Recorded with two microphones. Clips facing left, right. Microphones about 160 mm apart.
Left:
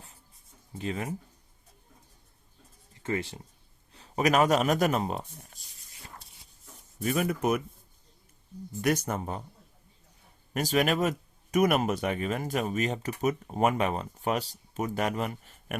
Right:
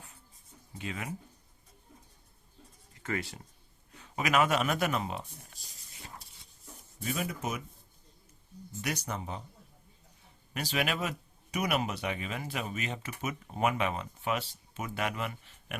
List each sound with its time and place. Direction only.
0.7 s speech: 35° left (ahead or behind)
3.0 s speech: 25° left (ahead or behind)
3.9 s speech: 35° left (ahead or behind)
7.0 s speech: 55° left (ahead or behind)
8.8 s speech: 50° left (ahead or behind)
10.5 s speech: 45° left (ahead or behind)